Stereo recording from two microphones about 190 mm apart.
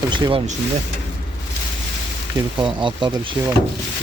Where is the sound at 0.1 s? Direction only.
25° right (ahead or behind).